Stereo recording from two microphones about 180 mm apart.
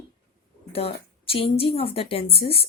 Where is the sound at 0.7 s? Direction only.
30° left (ahead or behind).